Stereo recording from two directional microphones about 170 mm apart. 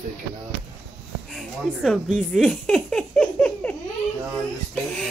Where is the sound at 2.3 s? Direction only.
5° left (ahead or behind).